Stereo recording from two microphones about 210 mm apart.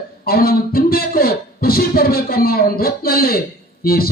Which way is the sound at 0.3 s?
45° left (ahead or behind).